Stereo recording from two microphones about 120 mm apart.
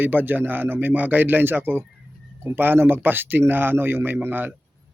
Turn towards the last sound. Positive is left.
turn(degrees=-15)  # may be behind; listen again after turning